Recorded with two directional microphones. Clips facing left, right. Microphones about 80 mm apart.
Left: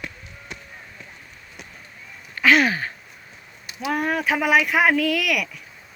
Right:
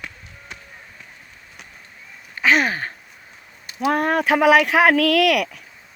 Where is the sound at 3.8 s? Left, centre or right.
Right.